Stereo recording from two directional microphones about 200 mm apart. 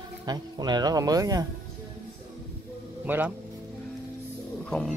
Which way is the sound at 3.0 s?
10° right (ahead or behind).